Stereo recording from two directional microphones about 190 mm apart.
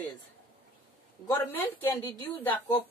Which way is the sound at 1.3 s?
15° left (ahead or behind).